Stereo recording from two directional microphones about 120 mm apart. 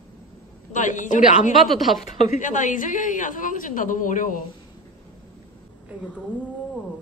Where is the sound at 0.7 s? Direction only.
90° left.